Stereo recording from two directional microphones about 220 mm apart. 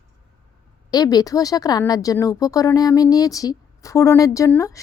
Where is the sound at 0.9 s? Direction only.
15° left (ahead or behind).